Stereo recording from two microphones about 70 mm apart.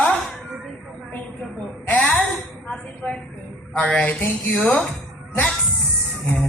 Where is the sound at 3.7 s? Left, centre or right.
Centre.